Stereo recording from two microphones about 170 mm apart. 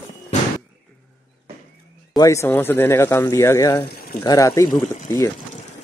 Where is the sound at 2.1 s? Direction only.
20° left (ahead or behind).